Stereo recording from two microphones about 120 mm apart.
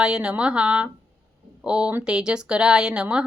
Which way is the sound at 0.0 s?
5° right (ahead or behind).